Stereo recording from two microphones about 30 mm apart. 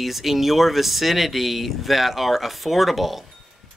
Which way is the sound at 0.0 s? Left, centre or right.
Centre.